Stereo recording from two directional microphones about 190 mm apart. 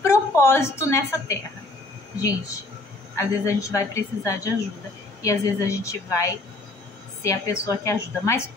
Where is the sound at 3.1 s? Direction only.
15° left (ahead or behind).